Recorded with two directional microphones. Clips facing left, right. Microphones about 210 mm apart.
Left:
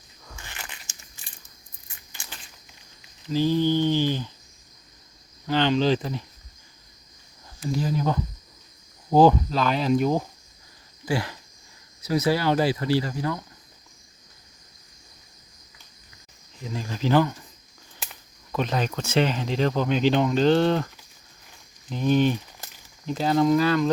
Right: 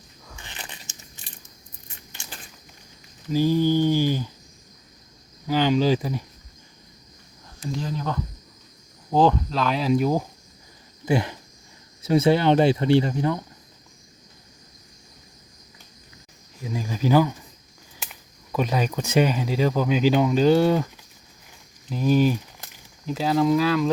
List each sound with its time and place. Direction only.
0.3 s a sound: 20° right (ahead or behind)
3.2 s mantra: 10° right (ahead or behind)
5.5 s speech: 10° right (ahead or behind)
7.7 s speech: 5° left (ahead or behind)
11.0 s speech: 20° right (ahead or behind)
16.6 s speech: 10° right (ahead or behind)